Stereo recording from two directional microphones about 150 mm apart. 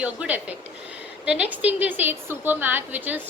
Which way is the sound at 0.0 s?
10° right (ahead or behind).